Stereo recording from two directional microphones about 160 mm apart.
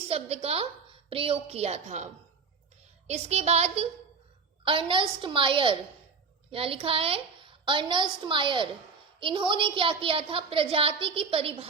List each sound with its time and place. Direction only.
0.1 s a woman's voice: 40° right (ahead or behind)
3.1 s a woman's voice: 45° right (ahead or behind)